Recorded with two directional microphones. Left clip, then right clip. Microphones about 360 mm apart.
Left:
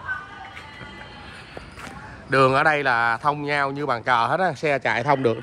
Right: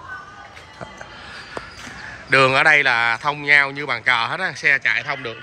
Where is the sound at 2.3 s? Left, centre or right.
Centre.